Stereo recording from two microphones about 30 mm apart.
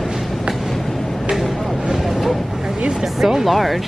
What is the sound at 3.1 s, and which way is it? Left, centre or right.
Speech, centre.